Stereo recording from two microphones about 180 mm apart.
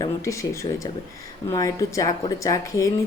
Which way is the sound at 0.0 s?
15° left (ahead or behind).